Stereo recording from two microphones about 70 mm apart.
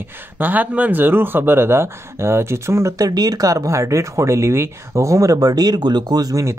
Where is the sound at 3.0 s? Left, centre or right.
Right.